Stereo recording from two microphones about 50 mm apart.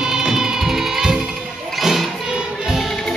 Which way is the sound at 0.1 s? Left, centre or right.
Centre.